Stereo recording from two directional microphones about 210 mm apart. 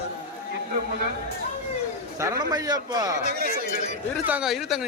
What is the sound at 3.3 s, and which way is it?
Speech, 45° right (ahead or behind).